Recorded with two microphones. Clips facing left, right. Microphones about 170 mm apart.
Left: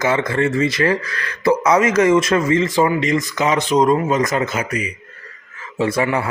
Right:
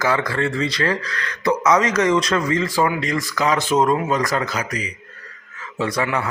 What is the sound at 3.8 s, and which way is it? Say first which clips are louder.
Speech: left 5 dB; centre (ahead or behind).